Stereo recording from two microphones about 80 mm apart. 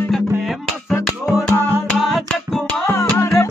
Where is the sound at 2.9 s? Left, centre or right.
Left.